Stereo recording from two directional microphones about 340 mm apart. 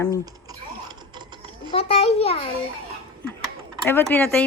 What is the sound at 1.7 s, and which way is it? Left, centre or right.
Speech, centre.